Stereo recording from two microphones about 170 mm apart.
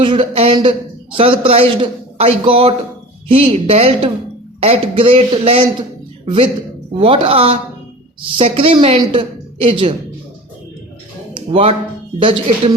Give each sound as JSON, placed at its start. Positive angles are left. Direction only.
{"t": 0.0, "sound": "a man's voice", "side_deg": -30}
{"t": 11.3, "sound": "a sound", "side_deg": -35}
{"t": 12.2, "sound": "a woman's voice", "side_deg": -30}